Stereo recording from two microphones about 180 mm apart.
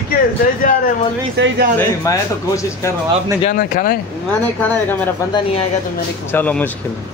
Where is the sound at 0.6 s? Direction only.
50° left (ahead or behind).